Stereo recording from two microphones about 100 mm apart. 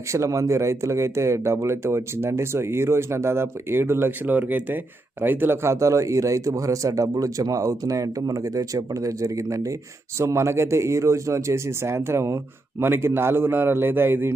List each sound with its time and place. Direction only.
0.1 s speech: 30° right (ahead or behind)